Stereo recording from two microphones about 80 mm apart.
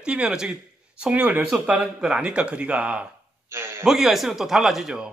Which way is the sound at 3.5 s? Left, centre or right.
Right.